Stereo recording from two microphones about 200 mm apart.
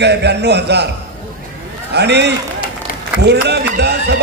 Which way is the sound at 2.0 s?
55° right (ahead or behind).